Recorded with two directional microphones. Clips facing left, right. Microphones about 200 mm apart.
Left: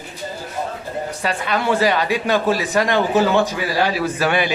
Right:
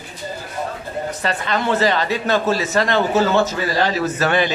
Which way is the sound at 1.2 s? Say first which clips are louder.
Left 1 dB; 10° left (ahead or behind).